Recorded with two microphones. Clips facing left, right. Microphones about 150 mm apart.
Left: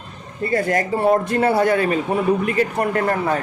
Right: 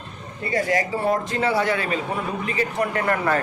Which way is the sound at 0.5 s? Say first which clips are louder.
Left 3 dB; 50° left (ahead or behind).